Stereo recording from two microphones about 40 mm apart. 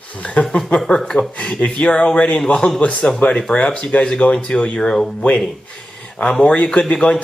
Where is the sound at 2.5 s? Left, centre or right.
Centre.